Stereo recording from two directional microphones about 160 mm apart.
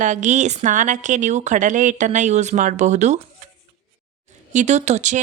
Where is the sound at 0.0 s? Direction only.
50° right (ahead or behind).